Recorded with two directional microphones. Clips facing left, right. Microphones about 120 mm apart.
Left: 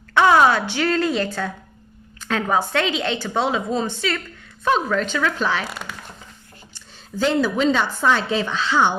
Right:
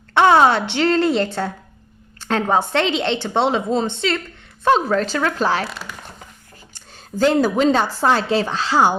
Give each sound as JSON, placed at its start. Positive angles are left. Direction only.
{"t": 0.1, "sound": "a woman's voice", "side_deg": -25}
{"t": 6.7, "sound": "speech", "side_deg": -45}